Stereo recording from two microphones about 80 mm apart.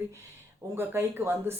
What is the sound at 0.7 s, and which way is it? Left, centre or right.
Speech, right.